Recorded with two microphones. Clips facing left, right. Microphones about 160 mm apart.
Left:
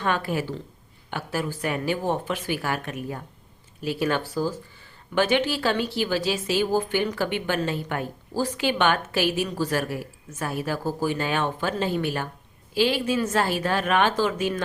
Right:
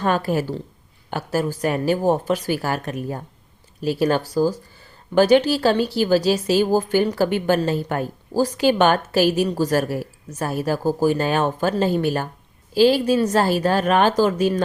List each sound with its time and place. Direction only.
0.0 s a woman's voice: 40° right (ahead or behind)